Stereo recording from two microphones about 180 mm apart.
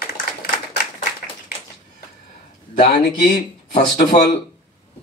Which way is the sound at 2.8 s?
55° left (ahead or behind).